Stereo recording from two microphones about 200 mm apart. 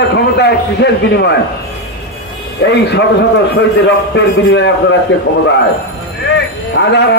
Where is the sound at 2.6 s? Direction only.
60° left (ahead or behind).